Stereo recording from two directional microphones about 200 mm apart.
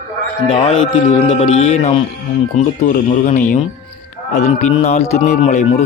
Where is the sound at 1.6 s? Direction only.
35° left (ahead or behind).